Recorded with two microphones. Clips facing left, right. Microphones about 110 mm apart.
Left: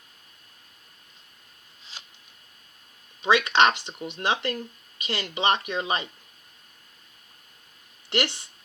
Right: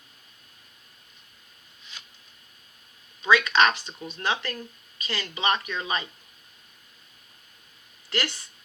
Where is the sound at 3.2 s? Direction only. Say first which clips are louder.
Left 1 dB; 25° left (ahead or behind).